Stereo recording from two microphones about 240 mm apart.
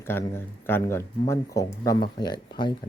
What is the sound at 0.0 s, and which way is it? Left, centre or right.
Speech, centre.